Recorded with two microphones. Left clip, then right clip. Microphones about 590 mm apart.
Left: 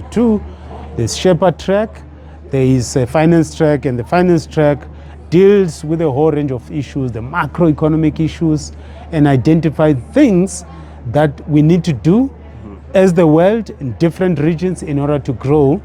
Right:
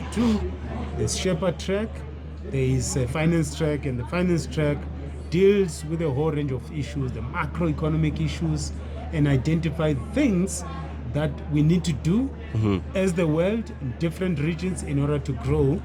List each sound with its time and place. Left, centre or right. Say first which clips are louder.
0.9 s speech: left 13 dB; left